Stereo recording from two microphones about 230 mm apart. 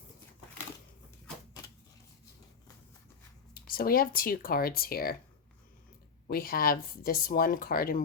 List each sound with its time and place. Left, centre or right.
3.5 s speech: left
6.2 s speech: left